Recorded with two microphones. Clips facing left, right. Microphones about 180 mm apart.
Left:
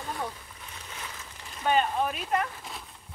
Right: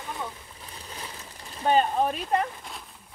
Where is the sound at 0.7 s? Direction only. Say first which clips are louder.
Right 2 dB; 35° right (ahead or behind).